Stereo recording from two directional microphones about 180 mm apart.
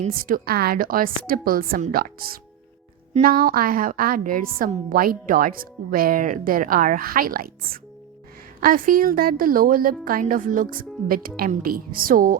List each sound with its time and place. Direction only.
0.1 s a woman's voice: 50° right (ahead or behind)